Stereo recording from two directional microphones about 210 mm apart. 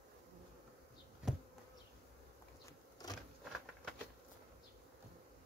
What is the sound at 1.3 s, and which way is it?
Bee, centre (ahead or behind).